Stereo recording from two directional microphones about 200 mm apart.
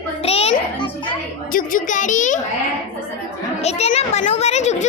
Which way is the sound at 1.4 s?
45° left (ahead or behind).